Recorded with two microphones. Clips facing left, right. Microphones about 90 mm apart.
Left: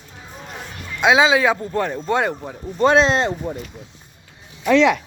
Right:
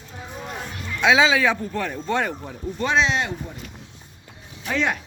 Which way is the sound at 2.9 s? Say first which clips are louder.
Left 5 dB; 40° left (ahead or behind).